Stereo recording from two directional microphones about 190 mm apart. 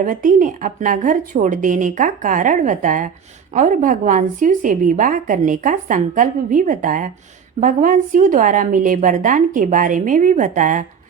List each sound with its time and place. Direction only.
0.0 s a woman's voice: 45° right (ahead or behind)